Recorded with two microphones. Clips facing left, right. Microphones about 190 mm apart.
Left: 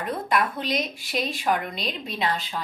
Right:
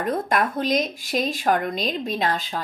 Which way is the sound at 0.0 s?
45° right (ahead or behind).